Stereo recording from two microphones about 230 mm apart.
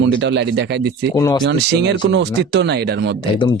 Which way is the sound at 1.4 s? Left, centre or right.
Right.